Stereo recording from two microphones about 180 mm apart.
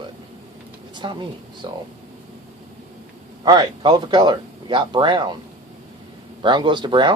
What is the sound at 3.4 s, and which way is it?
Speech, 25° right (ahead or behind).